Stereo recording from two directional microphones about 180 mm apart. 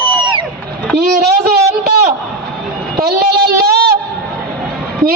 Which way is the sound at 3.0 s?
60° right (ahead or behind).